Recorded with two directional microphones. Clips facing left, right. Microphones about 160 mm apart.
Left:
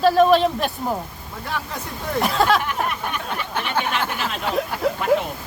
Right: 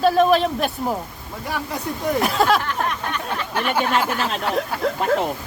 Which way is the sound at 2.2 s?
Centre (ahead or behind).